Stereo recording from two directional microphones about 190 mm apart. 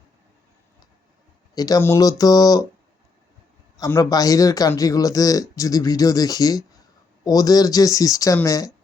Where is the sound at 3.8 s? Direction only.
20° left (ahead or behind).